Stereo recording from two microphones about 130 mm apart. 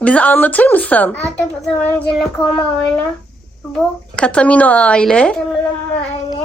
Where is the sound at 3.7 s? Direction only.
10° left (ahead or behind).